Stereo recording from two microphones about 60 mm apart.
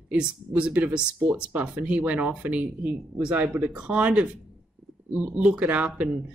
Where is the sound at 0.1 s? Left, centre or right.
Right.